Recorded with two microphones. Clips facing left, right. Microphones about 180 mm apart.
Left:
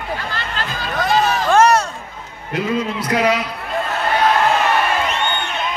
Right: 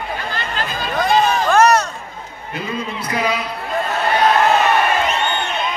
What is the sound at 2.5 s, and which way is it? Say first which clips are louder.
Speech: left 5 dB; 85° left.